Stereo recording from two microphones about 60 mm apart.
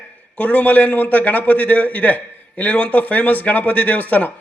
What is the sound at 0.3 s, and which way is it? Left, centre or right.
A man's voice, left.